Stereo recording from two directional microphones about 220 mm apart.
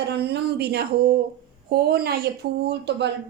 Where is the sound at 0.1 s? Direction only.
50° right (ahead or behind).